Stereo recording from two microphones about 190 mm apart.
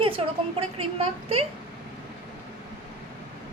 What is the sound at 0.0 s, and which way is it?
A woman's voice, 30° right (ahead or behind).